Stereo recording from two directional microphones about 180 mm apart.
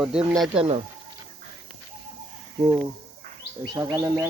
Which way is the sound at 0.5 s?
35° right (ahead or behind).